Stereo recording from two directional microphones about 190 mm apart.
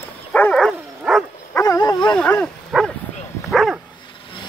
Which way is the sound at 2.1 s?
5° left (ahead or behind).